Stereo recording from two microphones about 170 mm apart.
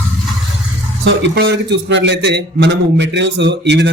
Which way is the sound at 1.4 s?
85° right.